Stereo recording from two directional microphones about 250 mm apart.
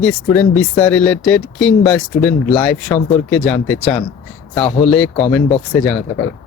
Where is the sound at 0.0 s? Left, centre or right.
Centre.